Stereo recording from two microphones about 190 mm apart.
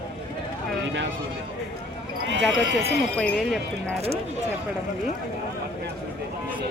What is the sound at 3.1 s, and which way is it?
Speech, 5° left (ahead or behind).